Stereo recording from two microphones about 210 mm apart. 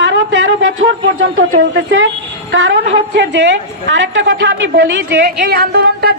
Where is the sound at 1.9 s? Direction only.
65° right (ahead or behind); by 6.1 s 50° right (ahead or behind).